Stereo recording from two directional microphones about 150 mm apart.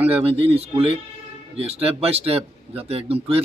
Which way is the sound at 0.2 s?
40° right (ahead or behind).